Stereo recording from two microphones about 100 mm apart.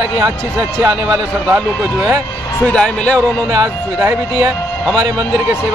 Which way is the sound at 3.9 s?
25° right (ahead or behind).